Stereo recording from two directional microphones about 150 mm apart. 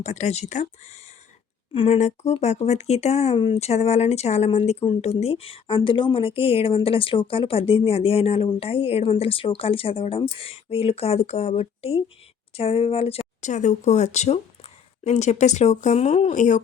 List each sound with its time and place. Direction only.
0.0 s speech: 50° left (ahead or behind)